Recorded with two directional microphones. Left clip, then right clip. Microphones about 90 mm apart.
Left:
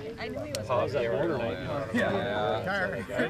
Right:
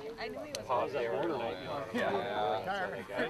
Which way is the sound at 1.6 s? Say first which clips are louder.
Left 6 dB; 60° left (ahead or behind).